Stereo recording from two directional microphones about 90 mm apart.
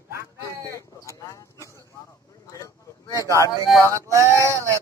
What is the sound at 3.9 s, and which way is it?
Speech, 35° right (ahead or behind).